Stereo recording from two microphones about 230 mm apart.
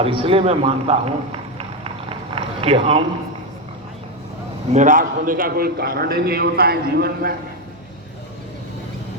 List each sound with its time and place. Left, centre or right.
0.0 s run: right
4.7 s a man's voice: right